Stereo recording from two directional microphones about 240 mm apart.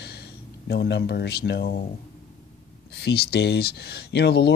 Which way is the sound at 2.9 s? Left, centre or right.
Left.